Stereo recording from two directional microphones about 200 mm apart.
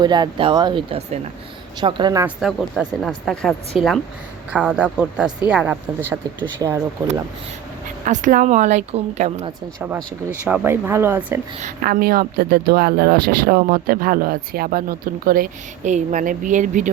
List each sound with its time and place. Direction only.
0.0 s speech: 20° right (ahead or behind)
2.2 s speech: centre (ahead or behind)
8.0 s a woman's voice: 40° right (ahead or behind)
10.4 s speech: 10° right (ahead or behind)
11.6 s speech: 50° right (ahead or behind)